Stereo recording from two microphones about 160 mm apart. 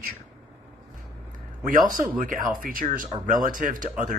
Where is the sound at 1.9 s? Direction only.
55° right (ahead or behind).